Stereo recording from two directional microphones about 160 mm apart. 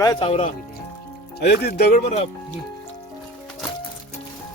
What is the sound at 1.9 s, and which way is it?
Speech, 45° left (ahead or behind).